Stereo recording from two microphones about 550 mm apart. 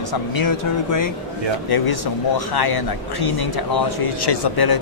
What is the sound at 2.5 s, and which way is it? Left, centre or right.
A man's voice, left.